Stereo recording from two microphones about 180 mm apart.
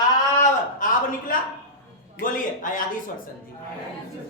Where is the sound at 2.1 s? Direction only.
50° left (ahead or behind).